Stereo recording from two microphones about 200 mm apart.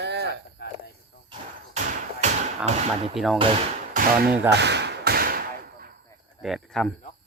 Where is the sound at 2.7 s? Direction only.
35° right (ahead or behind).